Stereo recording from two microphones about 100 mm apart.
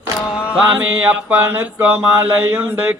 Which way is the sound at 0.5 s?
15° right (ahead or behind).